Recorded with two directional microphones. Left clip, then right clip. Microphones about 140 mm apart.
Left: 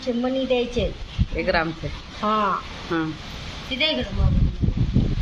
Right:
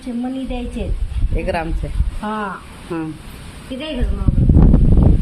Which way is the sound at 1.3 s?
55° right (ahead or behind).